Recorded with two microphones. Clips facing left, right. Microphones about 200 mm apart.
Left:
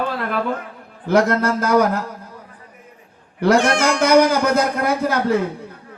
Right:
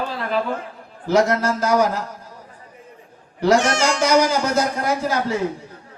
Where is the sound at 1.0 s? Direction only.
55° left (ahead or behind).